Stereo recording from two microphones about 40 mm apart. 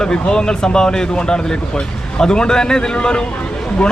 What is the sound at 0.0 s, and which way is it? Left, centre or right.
Speech, left.